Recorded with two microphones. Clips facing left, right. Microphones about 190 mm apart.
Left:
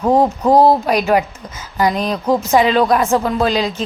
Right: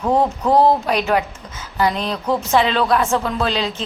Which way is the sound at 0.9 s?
10° left (ahead or behind).